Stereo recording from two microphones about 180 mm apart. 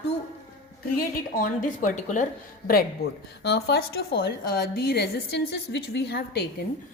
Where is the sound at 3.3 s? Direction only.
65° left (ahead or behind).